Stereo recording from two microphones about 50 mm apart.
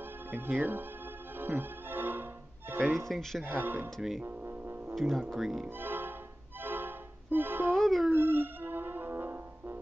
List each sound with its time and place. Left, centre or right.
0.6 s speech: right
1.4 s music: right
2.7 s speech: right
3.1 s dog: centre
3.4 s speech: right
4.9 s speech: centre
5.8 s music: right
7.7 s dog: centre
8.1 s music: right